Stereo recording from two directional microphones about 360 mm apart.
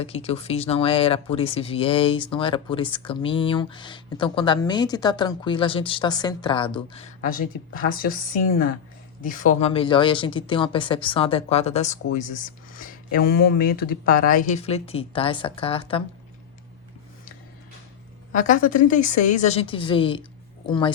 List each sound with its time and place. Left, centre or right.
0.0 s speech: centre
18.4 s speech: left